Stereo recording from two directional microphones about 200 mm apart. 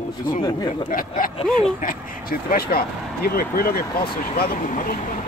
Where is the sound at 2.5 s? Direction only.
50° left (ahead or behind).